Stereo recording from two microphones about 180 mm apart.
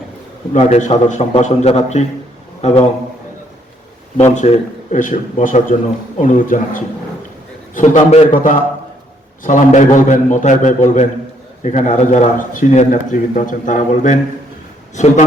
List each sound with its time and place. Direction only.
0.5 s a man's voice: 40° left (ahead or behind)
4.4 s a man's voice: 40° left (ahead or behind)
8.4 s a man's voice: 45° left (ahead or behind)